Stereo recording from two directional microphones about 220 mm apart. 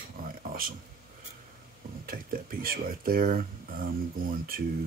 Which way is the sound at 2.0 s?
40° right (ahead or behind).